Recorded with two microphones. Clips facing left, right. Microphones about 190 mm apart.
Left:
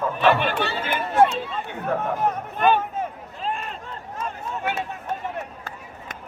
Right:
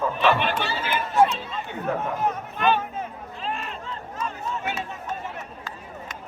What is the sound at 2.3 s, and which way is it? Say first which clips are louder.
Speech: left 3 dB; 45° left (ahead or behind).